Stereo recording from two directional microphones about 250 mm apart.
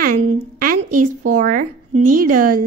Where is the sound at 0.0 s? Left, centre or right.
Right.